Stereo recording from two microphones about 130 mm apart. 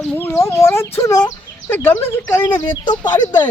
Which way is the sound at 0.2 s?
25° left (ahead or behind).